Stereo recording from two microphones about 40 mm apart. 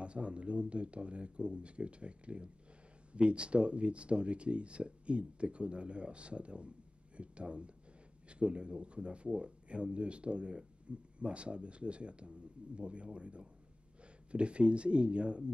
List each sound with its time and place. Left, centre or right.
0.0 s speech: right